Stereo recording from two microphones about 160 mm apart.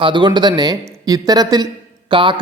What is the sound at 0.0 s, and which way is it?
A man's voice, 30° right (ahead or behind).